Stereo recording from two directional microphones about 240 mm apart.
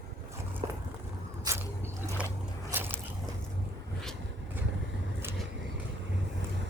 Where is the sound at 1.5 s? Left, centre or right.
Centre.